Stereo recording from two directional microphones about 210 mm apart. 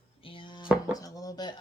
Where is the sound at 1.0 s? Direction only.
15° left (ahead or behind).